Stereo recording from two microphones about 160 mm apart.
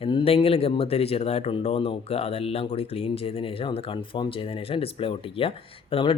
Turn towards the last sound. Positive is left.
turn(degrees=35)  # may be behind; listen again after turning